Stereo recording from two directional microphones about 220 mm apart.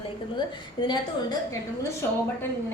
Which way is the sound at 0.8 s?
20° left (ahead or behind).